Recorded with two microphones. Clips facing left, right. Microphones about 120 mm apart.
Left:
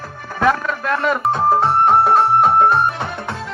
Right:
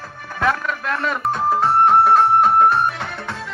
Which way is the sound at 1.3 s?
30° left (ahead or behind).